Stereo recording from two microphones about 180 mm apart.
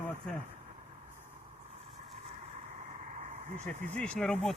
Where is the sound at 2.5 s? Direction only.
40° right (ahead or behind).